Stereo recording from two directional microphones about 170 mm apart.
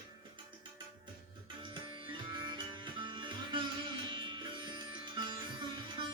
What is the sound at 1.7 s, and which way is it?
Music, 25° right (ahead or behind).